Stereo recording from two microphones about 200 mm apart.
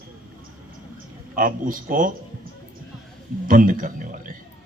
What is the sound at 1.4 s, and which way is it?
Speech, 45° right (ahead or behind).